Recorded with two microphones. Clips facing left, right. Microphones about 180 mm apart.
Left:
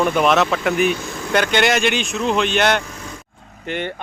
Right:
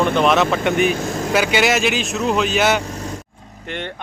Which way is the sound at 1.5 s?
5° right (ahead or behind).